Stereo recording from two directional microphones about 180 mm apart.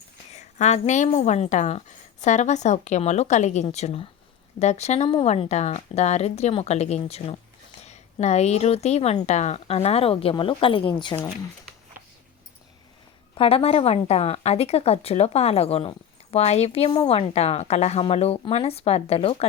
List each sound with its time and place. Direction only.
0.3 s a woman's voice: 40° left (ahead or behind)
13.3 s a woman's voice: 30° left (ahead or behind)